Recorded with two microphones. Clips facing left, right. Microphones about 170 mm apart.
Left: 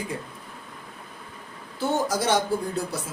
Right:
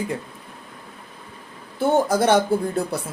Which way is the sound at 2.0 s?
55° right (ahead or behind).